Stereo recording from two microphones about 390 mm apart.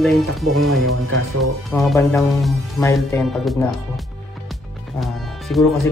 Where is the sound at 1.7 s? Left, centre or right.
Centre.